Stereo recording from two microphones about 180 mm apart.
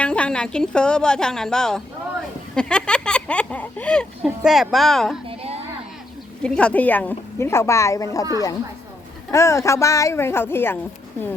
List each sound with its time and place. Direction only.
0.0 s a woman's voice: 5° left (ahead or behind)
5.3 s a sound: 35° right (ahead or behind)
6.4 s a woman's voice: 5° left (ahead or behind)
9.3 s a woman's voice: 15° left (ahead or behind)